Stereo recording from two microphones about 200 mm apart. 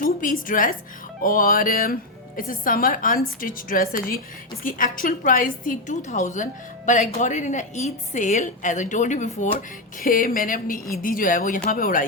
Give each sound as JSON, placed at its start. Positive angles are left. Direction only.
{"t": 0.0, "sound": "a woman's voice", "side_deg": 45}